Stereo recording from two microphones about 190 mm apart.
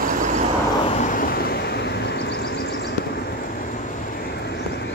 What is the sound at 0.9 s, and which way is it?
Vehicle, 45° left (ahead or behind).